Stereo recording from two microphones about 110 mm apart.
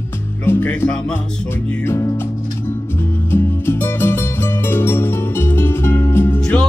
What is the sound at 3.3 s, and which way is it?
Music, 20° left (ahead or behind).